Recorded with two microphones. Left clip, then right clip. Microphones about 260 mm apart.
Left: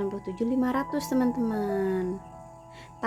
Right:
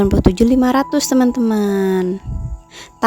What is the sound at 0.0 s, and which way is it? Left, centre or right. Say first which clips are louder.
A woman's voice: right 16 dB; right.